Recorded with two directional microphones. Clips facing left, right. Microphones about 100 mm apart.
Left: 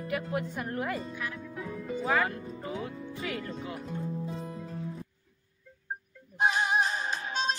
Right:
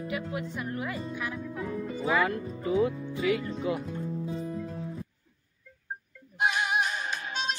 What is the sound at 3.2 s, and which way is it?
Speech, 45° left (ahead or behind).